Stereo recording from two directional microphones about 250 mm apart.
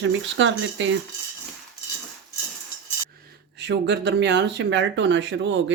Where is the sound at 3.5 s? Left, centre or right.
Right.